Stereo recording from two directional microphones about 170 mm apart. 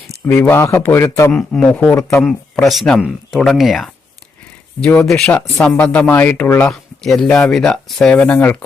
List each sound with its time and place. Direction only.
0.3 s speech: 15° left (ahead or behind)
1.3 s speech: 5° left (ahead or behind)